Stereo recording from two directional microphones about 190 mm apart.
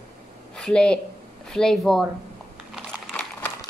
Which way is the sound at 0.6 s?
5° left (ahead or behind).